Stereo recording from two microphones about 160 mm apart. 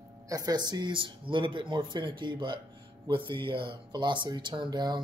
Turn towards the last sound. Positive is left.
turn(degrees=-25)  # may be behind; listen again after turning